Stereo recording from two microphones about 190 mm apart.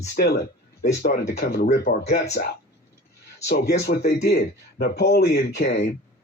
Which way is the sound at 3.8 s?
60° left (ahead or behind).